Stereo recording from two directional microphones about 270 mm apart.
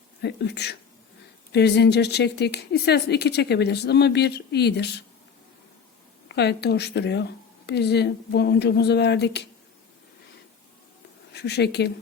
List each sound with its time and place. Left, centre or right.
0.2 s speech: left
6.2 s speech: left
11.3 s speech: left